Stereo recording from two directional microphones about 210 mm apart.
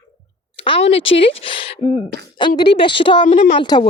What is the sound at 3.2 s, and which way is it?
Speech, 40° left (ahead or behind).